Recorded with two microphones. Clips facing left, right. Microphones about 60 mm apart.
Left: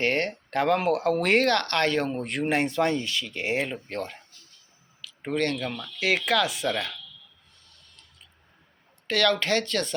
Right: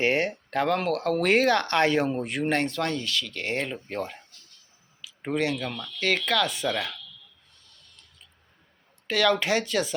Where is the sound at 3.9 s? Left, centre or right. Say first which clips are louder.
Right 1 dB; centre.